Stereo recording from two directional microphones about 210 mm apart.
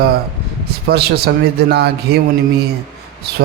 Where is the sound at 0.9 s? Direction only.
50° right (ahead or behind).